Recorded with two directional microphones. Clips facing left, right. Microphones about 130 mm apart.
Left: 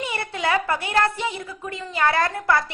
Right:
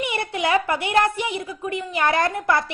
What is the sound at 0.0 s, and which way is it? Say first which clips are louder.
A woman's voice: right 2 dB; 15° right (ahead or behind).